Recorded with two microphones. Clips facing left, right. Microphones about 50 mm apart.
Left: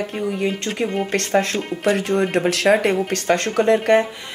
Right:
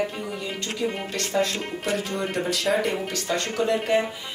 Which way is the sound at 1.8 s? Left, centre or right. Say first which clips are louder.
Left 9 dB; left.